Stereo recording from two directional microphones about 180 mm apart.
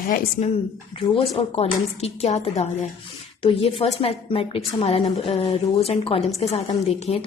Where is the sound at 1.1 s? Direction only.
30° left (ahead or behind).